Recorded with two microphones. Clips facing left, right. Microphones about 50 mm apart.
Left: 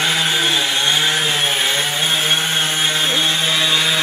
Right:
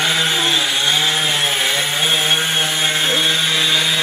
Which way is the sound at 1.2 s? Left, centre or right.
Centre.